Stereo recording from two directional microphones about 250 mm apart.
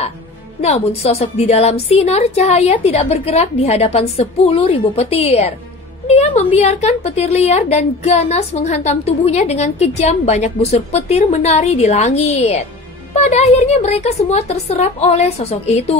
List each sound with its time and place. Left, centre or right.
0.6 s a woman's voice: left